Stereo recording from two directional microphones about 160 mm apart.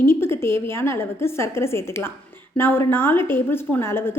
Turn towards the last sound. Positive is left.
turn(degrees=15)  # may be behind; listen again after turning